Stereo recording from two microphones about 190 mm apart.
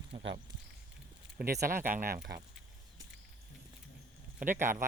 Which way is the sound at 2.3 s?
60° right (ahead or behind).